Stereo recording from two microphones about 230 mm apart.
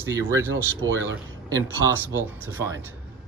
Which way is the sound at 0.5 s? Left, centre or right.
Right.